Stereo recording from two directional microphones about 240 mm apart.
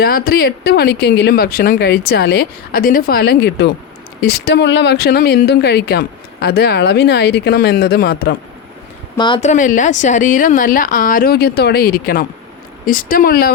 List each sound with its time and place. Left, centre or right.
0.0 s speech: left
9.1 s speech: centre; by 13.5 s left